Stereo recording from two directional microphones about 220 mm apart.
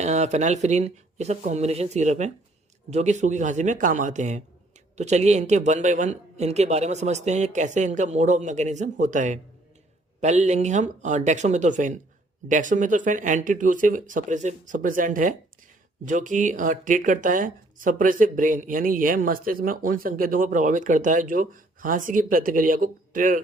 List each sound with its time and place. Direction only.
0.0 s speech: 30° right (ahead or behind)